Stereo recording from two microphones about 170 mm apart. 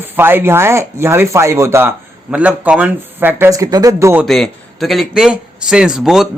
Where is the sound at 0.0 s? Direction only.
10° right (ahead or behind).